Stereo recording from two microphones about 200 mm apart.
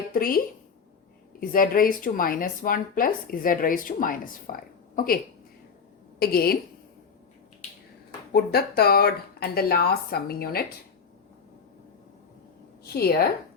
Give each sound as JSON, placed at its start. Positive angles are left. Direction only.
{"t": 0.1, "sound": "speech", "side_deg": 45}
{"t": 8.3, "sound": "speech", "side_deg": 50}
{"t": 12.8, "sound": "a woman's voice", "side_deg": 50}